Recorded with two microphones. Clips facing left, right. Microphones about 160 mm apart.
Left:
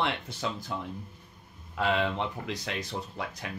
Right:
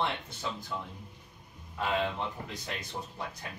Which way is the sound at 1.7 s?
85° left.